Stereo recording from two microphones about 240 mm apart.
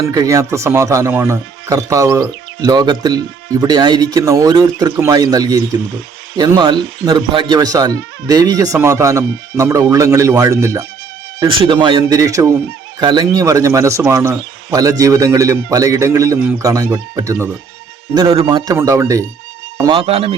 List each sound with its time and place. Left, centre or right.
0.0 s speech: centre